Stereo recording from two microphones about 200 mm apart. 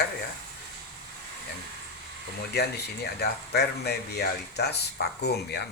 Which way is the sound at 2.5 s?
55° left (ahead or behind).